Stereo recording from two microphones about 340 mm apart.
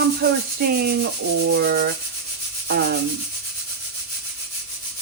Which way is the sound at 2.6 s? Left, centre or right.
Right.